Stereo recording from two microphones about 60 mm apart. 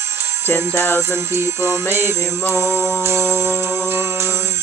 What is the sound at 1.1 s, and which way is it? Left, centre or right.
Music, right.